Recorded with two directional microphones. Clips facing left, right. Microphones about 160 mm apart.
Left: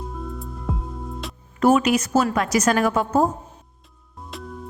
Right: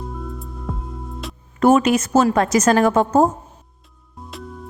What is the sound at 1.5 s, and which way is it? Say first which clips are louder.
Speech: right 3 dB; 45° right (ahead or behind).